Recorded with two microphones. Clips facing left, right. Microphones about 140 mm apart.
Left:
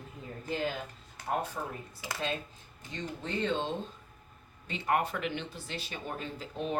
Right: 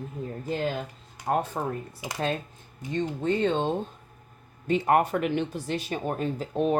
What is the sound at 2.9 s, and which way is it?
Speech, 50° right (ahead or behind).